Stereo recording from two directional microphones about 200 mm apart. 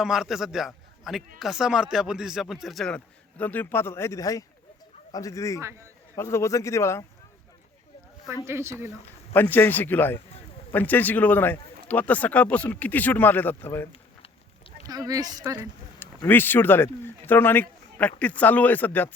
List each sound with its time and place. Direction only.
0.0 s a man's voice: centre (ahead or behind); by 5.5 s 15° left (ahead or behind)
5.5 s speech: 15° right (ahead or behind)
6.1 s speech: 15° left (ahead or behind)
8.4 s speech: 15° right (ahead or behind)
9.3 s speech: 10° left (ahead or behind)
14.8 s speech: 20° right (ahead or behind)
16.0 s speech: 10° left (ahead or behind)